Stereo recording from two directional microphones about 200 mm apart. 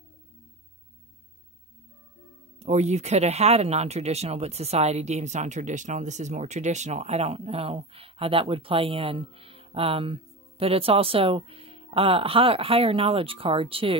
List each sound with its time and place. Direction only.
2.6 s speech: 35° right (ahead or behind)